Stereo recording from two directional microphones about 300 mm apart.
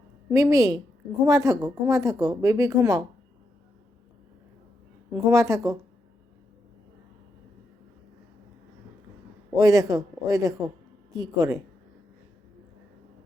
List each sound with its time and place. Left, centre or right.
0.3 s speech: centre
5.1 s speech: centre
9.6 s speech: centre